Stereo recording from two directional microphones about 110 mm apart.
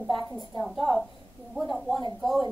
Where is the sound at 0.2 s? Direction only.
30° left (ahead or behind).